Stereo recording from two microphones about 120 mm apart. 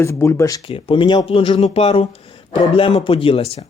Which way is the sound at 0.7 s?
45° left (ahead or behind).